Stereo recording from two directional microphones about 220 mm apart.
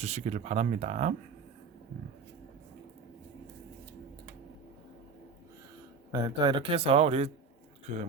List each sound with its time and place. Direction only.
0.0 s speech: 30° right (ahead or behind)
6.1 s speech: 20° right (ahead or behind)